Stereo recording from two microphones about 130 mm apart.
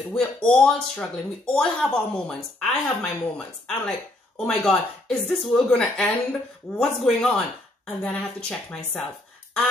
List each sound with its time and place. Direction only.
0.1 s a woman's voice: 5° left (ahead or behind)